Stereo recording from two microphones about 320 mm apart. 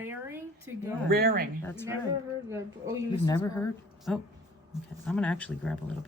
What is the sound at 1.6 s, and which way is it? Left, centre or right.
Speech, centre.